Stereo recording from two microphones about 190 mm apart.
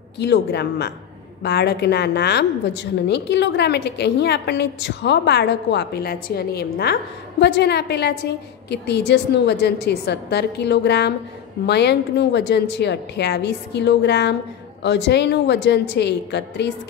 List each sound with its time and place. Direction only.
0.2 s a woman's voice: 60° left (ahead or behind)